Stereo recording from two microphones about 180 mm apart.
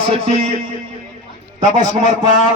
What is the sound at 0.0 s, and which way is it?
Speech, 30° right (ahead or behind).